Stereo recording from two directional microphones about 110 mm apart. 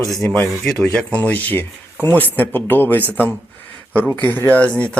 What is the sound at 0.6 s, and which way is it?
Speech, 10° left (ahead or behind).